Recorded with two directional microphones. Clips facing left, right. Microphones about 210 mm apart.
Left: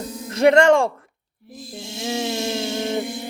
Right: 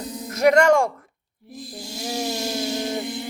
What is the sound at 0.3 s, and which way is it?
Speech, 30° left (ahead or behind).